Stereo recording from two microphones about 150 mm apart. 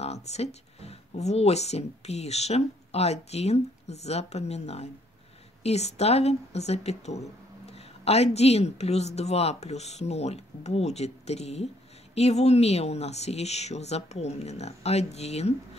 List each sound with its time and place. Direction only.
0.0 s speech: 45° left (ahead or behind)